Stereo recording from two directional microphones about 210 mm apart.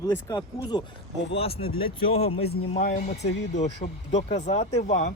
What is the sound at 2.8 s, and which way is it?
Speech, 40° left (ahead or behind).